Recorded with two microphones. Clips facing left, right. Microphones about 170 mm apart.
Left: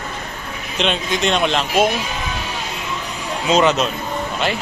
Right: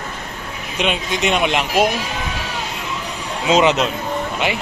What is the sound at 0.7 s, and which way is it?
Speech, 10° right (ahead or behind).